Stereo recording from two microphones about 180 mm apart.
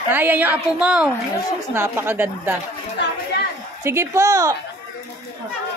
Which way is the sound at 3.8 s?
15° right (ahead or behind).